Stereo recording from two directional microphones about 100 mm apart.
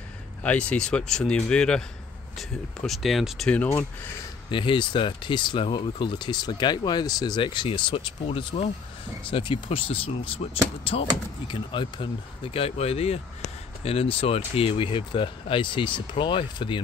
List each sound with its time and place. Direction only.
0.4 s speech: 10° left (ahead or behind)
3.6 s speech: 20° left (ahead or behind)
4.5 s speech: 55° left (ahead or behind); by 13.2 s 85° left
13.8 s speech: 70° left (ahead or behind); by 16.8 s 55° left (ahead or behind)